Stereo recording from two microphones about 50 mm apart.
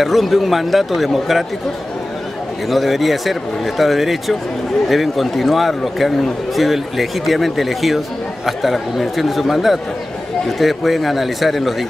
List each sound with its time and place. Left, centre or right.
0.0 s speech: centre
2.7 s speech: centre